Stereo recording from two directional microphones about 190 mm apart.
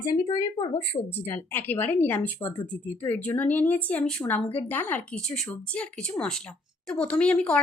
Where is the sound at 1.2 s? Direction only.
10° left (ahead or behind).